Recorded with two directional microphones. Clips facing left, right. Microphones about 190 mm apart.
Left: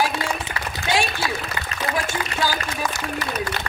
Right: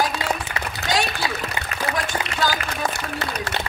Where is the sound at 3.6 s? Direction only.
25° right (ahead or behind).